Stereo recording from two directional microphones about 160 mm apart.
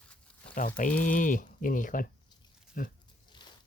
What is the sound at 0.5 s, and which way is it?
Speech, 55° left (ahead or behind).